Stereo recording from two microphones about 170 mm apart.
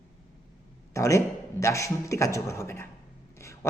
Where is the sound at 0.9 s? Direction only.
20° left (ahead or behind).